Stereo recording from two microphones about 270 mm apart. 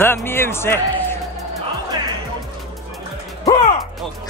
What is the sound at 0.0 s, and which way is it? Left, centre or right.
Speech, centre.